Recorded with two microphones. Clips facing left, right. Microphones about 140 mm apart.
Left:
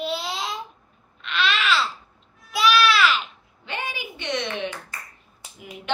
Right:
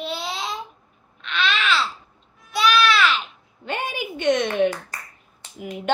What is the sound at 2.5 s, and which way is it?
Baby cry, centre (ahead or behind).